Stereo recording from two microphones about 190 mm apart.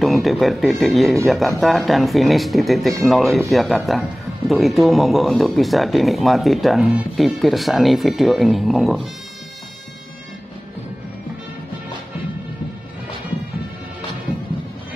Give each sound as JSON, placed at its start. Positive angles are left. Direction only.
{"t": 0.0, "sound": "speech", "side_deg": 0}